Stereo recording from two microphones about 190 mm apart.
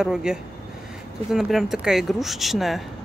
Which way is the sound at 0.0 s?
5° right (ahead or behind).